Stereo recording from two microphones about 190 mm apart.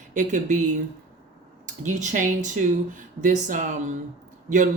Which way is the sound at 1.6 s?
40° right (ahead or behind).